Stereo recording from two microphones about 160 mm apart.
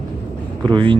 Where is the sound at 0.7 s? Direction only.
30° right (ahead or behind).